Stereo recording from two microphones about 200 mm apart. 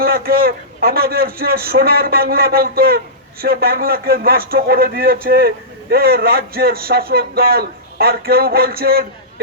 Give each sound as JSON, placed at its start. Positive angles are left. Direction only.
{"t": 0.0, "sound": "speech", "side_deg": -50}